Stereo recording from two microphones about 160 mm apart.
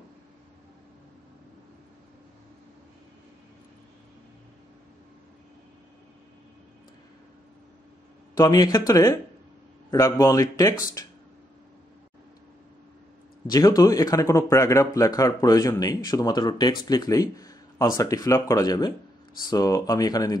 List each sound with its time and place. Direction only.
8.4 s speech: 20° left (ahead or behind)
13.5 s speech: 25° left (ahead or behind)